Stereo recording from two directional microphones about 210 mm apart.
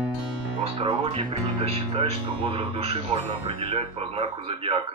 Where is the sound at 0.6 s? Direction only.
25° right (ahead or behind).